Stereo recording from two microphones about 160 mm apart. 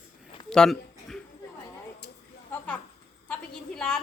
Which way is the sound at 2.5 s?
10° left (ahead or behind).